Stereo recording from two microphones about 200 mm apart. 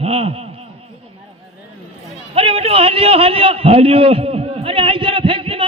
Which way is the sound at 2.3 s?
30° right (ahead or behind).